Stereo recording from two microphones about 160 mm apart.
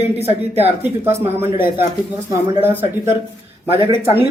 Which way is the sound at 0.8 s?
15° right (ahead or behind).